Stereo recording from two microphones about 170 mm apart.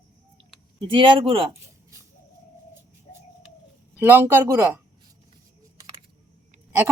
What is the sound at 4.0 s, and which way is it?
Speech, 10° right (ahead or behind).